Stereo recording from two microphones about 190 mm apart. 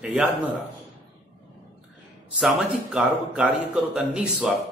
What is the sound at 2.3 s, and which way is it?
Speech, 5° right (ahead or behind).